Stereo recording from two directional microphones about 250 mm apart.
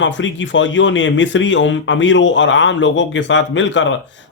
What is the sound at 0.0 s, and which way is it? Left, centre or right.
Speech, left.